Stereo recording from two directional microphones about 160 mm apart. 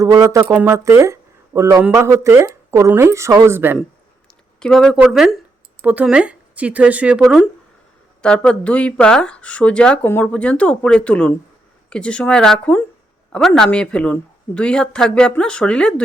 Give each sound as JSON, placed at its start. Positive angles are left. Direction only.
{"t": 0.0, "sound": "speech", "side_deg": -20}
{"t": 4.6, "sound": "speech", "side_deg": 5}
{"t": 8.2, "sound": "speech", "side_deg": 5}